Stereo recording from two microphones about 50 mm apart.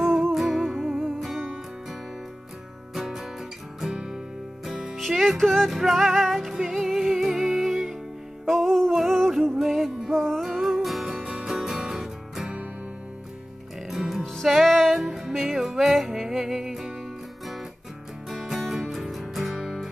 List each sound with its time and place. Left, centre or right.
0.0 s music: centre
2.9 s music: centre
4.9 s music: centre
10.1 s music: centre
13.8 s music: centre
14.2 s music: centre
18.3 s music: centre